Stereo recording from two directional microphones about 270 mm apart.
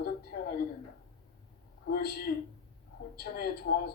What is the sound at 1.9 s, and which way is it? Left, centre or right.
A man's voice, left.